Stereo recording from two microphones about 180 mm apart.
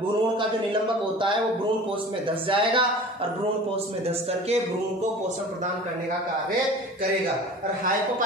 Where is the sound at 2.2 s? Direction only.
30° right (ahead or behind).